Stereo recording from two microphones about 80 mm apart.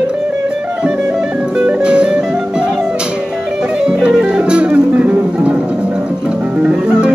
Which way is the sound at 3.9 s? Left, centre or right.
Centre.